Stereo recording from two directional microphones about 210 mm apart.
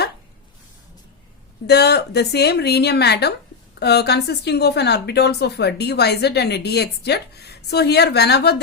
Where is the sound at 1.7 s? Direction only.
50° left (ahead or behind).